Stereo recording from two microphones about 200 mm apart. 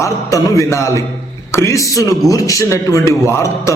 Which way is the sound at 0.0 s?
15° left (ahead or behind).